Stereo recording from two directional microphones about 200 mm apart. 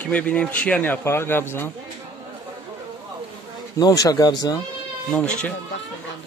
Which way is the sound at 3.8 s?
20° left (ahead or behind).